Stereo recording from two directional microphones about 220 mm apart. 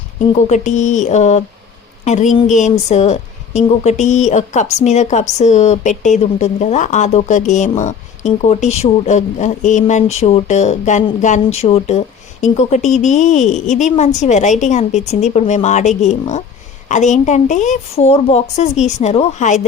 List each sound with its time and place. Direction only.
0.3 s speech: 35° left (ahead or behind)